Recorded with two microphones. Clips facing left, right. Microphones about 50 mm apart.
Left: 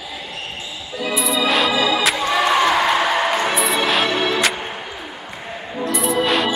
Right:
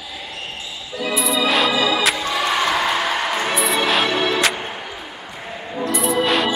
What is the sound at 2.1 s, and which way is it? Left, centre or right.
Music, centre.